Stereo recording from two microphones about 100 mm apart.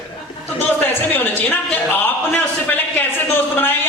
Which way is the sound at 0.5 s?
20° left (ahead or behind).